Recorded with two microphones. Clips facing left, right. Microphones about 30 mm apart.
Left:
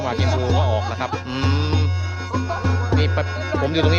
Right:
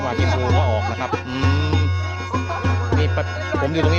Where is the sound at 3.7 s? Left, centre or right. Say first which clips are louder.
Left 2 dB; left.